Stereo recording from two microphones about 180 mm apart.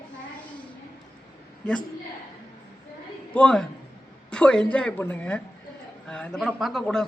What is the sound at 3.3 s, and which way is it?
A man's voice, 5° left (ahead or behind).